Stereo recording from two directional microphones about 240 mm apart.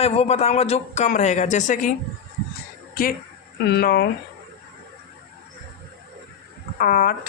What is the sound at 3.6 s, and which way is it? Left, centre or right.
Speech, left.